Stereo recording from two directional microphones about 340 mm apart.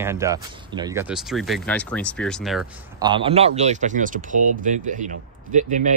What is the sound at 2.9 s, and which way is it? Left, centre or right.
Speech, centre.